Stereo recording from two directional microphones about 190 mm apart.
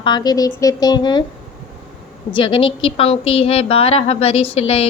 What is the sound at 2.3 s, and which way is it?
A woman's voice, 25° left (ahead or behind).